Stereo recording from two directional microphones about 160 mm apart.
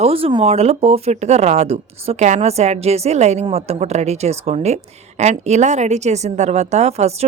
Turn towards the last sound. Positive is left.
turn(degrees=-40)  # may be behind; listen again after turning